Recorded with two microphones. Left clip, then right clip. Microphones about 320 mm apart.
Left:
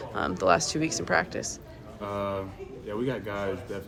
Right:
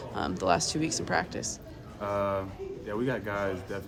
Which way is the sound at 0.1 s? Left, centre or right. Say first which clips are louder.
Left 4 dB; centre.